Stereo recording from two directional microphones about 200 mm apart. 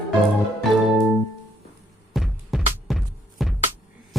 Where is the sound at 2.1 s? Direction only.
Centre (ahead or behind).